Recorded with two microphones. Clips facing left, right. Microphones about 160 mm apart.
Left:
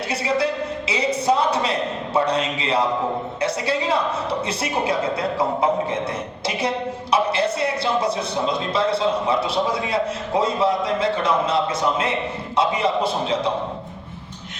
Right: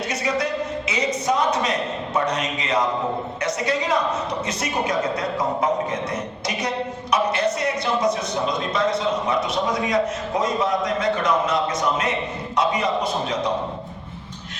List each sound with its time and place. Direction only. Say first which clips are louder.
0.1 s a sound: left 3 dB; 30° left (ahead or behind)
2.1 s a man's voice: left 3 dB; 30° left (ahead or behind)
7.1 s a man's voice: left 1 dB; 30° left (ahead or behind)